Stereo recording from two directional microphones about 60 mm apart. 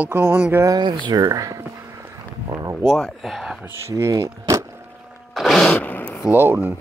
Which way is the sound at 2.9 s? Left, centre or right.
Centre.